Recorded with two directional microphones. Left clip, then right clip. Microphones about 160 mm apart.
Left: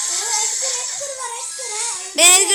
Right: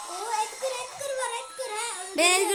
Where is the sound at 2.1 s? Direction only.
Centre (ahead or behind).